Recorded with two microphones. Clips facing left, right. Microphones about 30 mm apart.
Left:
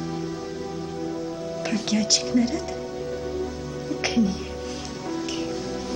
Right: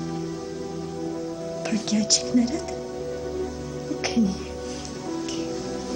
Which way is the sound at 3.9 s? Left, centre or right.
Centre.